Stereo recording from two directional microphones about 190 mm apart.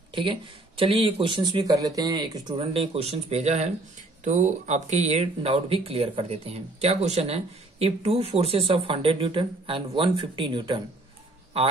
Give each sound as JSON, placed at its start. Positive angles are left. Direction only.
{"t": 0.1, "sound": "speech", "side_deg": -25}